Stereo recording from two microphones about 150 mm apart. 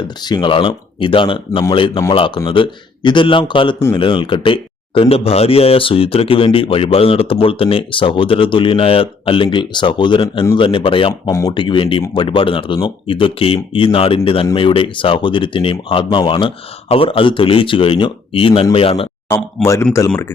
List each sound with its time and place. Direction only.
0.0 s a man's voice: 30° left (ahead or behind)
11.3 s a man's voice: 20° left (ahead or behind)
11.5 s a man's voice: 35° left (ahead or behind)
19.6 s a man's voice: 20° left (ahead or behind)